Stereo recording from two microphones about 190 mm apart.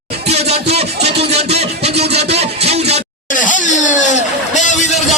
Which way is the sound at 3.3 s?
45° left (ahead or behind).